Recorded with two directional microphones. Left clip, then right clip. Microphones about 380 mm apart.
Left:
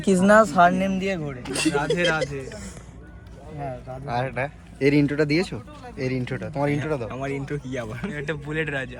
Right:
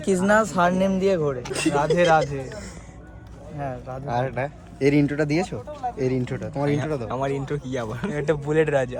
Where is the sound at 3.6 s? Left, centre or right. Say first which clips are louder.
Right 2 dB; centre.